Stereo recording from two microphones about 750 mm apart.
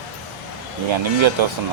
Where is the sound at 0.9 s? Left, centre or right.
Right.